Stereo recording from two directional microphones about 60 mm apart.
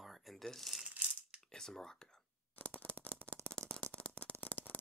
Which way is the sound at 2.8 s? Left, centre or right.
Right.